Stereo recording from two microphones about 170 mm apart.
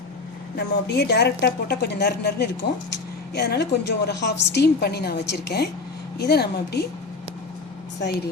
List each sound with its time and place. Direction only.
0.5 s a woman's voice: 75° left (ahead or behind)